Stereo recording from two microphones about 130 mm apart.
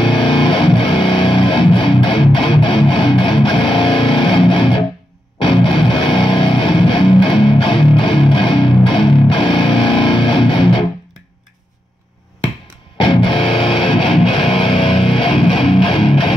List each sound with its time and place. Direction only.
0.0 s music: 40° left (ahead or behind)
12.9 s music: 40° left (ahead or behind)